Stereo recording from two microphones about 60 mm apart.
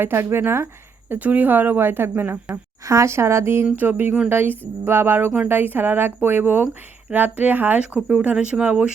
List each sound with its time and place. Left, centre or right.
0.0 s speech: right
1.1 s speech: right
2.8 s speech: right